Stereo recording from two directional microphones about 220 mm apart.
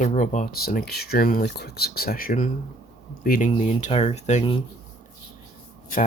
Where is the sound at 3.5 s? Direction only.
25° left (ahead or behind).